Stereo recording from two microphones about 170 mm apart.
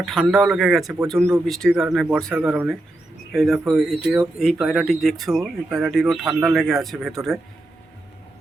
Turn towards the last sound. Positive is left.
turn(degrees=0)  # may be behind; listen again after turning